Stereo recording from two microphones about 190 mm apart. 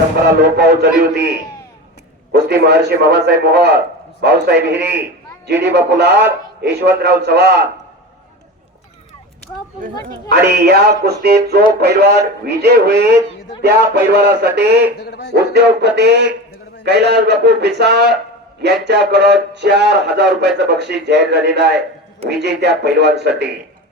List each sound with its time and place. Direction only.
0.5 s speech: 60° right (ahead or behind)
2.3 s speech: 60° right (ahead or behind)
10.2 s speech: 60° right (ahead or behind)
15.0 s speech: 60° left (ahead or behind)
15.8 s speech: 60° right (ahead or behind)